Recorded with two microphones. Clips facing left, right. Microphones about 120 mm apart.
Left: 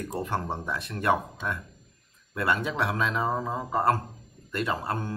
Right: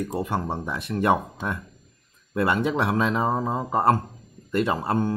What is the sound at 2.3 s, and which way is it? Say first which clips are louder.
A man's voice: right 5 dB; 25° right (ahead or behind).